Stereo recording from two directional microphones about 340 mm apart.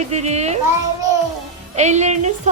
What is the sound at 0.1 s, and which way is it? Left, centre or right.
Speech, centre.